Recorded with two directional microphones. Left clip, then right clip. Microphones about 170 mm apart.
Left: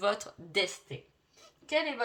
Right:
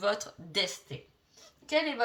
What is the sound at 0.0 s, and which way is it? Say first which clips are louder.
Speech: even; 40° left (ahead or behind).